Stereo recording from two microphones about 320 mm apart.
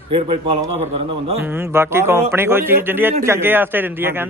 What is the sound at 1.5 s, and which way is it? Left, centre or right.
Speech, centre.